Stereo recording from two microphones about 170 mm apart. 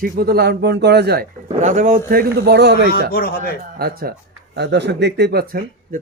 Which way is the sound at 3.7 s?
65° right (ahead or behind).